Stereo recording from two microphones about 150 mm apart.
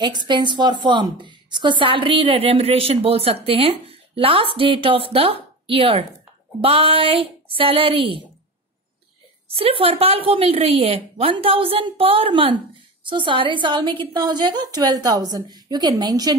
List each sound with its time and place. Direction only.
0.0 s a woman's voice: 30° right (ahead or behind)
9.5 s a woman's voice: 40° right (ahead or behind)